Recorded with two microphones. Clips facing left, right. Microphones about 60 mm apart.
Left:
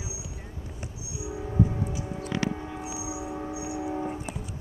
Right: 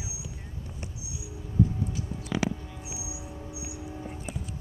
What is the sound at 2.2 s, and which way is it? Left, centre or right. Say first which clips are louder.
Vehicle: even; left.